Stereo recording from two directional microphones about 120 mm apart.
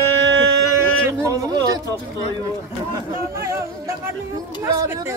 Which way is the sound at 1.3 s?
30° right (ahead or behind).